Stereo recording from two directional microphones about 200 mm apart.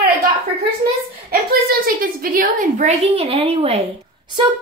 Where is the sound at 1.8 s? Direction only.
45° right (ahead or behind); by 3.8 s 30° right (ahead or behind).